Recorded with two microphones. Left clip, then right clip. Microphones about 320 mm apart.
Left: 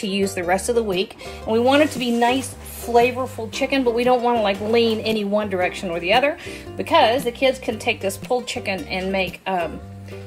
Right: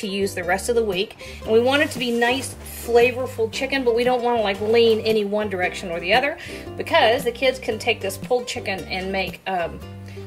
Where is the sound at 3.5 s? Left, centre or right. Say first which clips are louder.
Left 3 dB; centre.